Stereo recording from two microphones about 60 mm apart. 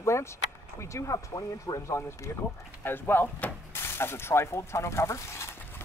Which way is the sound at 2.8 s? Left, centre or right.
Left.